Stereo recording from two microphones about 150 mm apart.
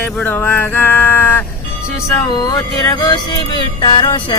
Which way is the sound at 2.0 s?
15° left (ahead or behind).